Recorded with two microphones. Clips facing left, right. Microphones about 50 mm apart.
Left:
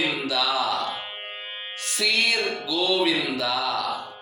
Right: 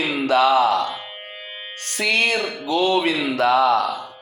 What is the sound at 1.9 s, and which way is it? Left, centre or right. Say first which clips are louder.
Music: right 4 dB; right.